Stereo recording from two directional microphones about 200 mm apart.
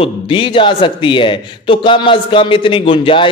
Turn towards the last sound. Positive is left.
turn(degrees=25)  # may be behind; listen again after turning